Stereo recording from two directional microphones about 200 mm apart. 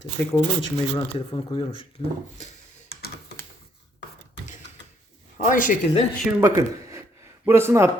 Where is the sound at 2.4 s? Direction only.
35° left (ahead or behind).